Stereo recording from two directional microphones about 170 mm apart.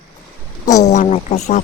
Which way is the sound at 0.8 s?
40° left (ahead or behind).